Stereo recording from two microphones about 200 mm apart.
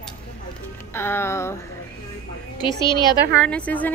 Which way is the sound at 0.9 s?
10° left (ahead or behind).